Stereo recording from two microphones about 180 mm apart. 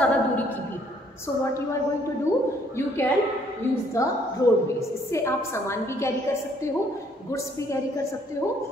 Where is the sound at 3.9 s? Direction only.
15° left (ahead or behind).